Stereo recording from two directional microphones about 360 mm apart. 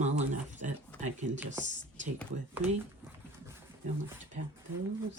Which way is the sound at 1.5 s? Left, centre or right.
Right.